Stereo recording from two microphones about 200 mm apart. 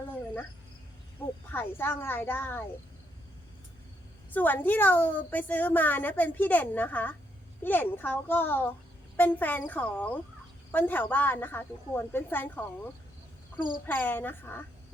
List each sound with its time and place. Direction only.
1.2 s a sound: 10° left (ahead or behind)
1.5 s a woman's voice: 10° left (ahead or behind)
4.3 s a woman's voice: 10° left (ahead or behind)
13.6 s speech: 45° left (ahead or behind)
13.8 s a woman's voice: 10° left (ahead or behind)